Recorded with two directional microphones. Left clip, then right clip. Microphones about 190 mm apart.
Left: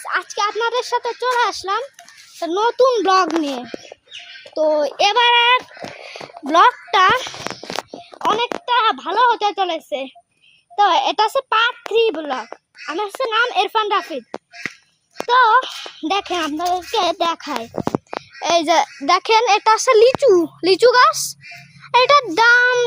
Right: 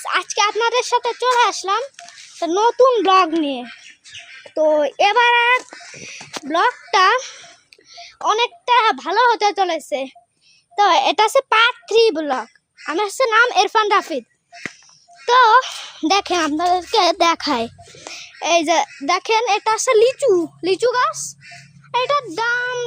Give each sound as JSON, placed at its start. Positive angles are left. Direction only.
{"t": 0.0, "sound": "a child's voice", "side_deg": -10}
{"t": 4.6, "sound": "a child's voice", "side_deg": -15}
{"t": 6.0, "sound": "a sound", "side_deg": 20}
{"t": 6.9, "sound": "a child's voice", "side_deg": -15}
{"t": 17.3, "sound": "speech", "side_deg": -45}
{"t": 18.3, "sound": "a child's voice", "side_deg": -15}
{"t": 20.7, "sound": "a woman's voice", "side_deg": 25}
{"t": 21.9, "sound": "child singing", "side_deg": 30}